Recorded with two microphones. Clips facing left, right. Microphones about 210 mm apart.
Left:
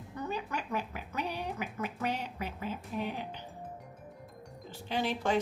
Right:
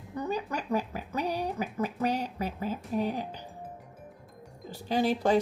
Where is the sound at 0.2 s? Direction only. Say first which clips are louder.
Right 4 dB; 40° right (ahead or behind).